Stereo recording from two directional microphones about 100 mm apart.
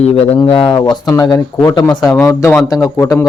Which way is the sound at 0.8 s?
45° left (ahead or behind).